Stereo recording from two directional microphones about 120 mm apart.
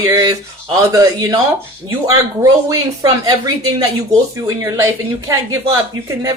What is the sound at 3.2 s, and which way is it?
A woman's voice, 30° right (ahead or behind).